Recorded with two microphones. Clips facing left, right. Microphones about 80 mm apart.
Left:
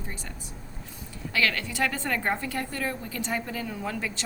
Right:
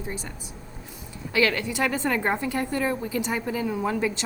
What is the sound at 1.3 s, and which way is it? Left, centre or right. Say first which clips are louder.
A woman's voice: right 4 dB; centre.